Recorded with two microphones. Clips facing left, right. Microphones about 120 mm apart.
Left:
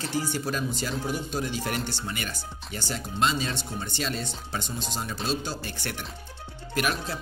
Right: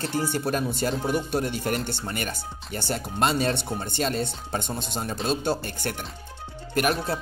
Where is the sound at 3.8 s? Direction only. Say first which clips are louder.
Right 5 dB; 45° right (ahead or behind).